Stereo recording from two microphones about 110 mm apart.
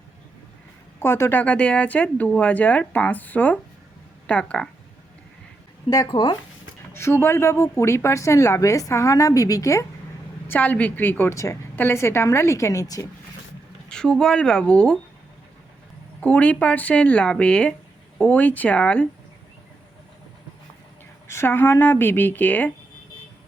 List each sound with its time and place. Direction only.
0.9 s speech: 25° left (ahead or behind)
6.1 s speech: 50° left (ahead or behind)
6.9 s speech: 20° left (ahead or behind)
10.5 s speech: 15° left (ahead or behind); by 13.1 s 30° left (ahead or behind)
13.9 s speech: 5° left (ahead or behind)
16.2 s speech: 15° left (ahead or behind)
21.2 s speech: 20° left (ahead or behind)